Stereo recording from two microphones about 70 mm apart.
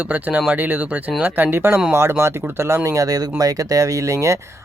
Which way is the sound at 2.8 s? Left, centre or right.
Right.